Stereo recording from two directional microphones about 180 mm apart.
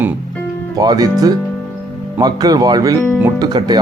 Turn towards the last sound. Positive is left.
turn(degrees=-25)  # may be behind; listen again after turning